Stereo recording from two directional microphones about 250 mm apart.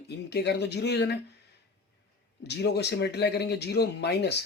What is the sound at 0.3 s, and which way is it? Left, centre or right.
Speech, left.